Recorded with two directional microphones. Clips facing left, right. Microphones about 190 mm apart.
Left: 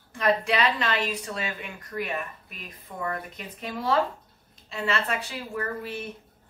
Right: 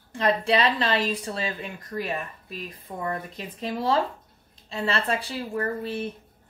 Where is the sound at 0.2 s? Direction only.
30° right (ahead or behind).